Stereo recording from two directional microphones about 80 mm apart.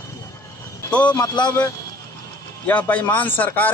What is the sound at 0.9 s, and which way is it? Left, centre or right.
Speech, centre.